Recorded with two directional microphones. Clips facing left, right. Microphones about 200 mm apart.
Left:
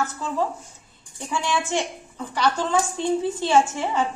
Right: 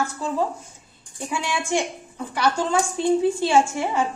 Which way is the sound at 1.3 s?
10° right (ahead or behind).